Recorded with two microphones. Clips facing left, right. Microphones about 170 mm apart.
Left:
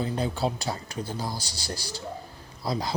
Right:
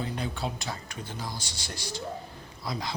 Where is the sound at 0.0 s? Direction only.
35° left (ahead or behind).